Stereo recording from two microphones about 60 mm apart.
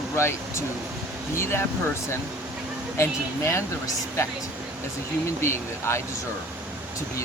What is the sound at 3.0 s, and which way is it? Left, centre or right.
Speech, left.